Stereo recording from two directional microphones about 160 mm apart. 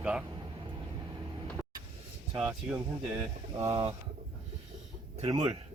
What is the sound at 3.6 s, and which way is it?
Speech, 20° right (ahead or behind).